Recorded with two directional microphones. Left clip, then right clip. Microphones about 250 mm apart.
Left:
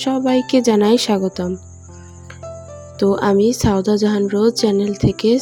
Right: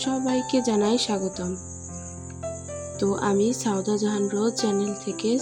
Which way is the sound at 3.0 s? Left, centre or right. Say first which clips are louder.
Left 9 dB; left.